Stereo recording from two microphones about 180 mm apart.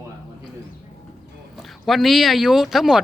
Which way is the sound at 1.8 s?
Centre (ahead or behind).